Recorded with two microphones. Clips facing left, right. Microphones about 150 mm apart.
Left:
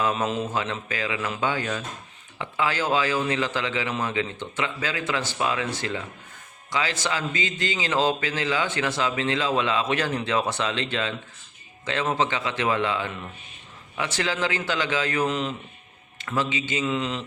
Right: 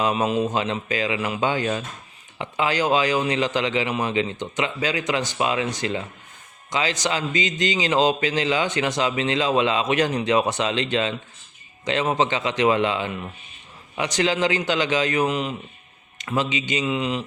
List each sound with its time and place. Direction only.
0.0 s a man's voice: 15° right (ahead or behind)